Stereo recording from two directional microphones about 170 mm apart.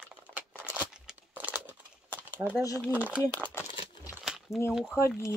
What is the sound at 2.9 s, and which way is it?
Speech, 10° right (ahead or behind).